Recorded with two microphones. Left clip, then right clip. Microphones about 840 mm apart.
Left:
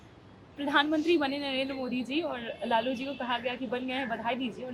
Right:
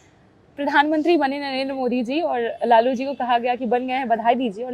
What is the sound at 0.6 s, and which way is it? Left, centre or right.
A woman's voice, right.